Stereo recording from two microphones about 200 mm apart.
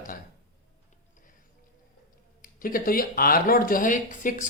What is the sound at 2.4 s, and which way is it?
Speech, 45° left (ahead or behind).